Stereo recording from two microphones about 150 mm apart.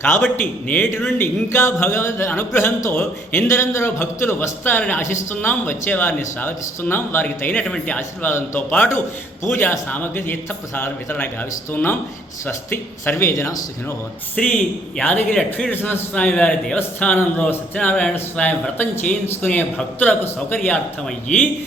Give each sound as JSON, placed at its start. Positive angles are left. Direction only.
{"t": 0.0, "sound": "speech", "side_deg": 15}
{"t": 14.4, "sound": "a man's voice", "side_deg": 5}